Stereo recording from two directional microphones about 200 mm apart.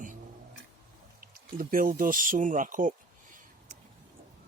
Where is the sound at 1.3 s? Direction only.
45° right (ahead or behind).